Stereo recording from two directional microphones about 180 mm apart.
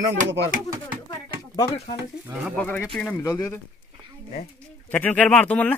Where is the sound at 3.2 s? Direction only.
20° left (ahead or behind).